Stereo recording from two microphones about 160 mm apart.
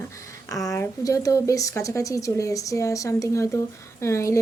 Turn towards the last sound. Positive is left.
turn(degrees=20)  # may be behind; listen again after turning